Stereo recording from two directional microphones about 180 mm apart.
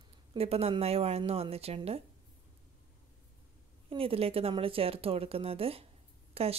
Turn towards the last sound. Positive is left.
turn(degrees=-35)  # may be behind; listen again after turning